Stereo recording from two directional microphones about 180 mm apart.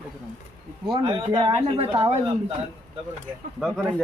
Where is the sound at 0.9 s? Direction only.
25° right (ahead or behind).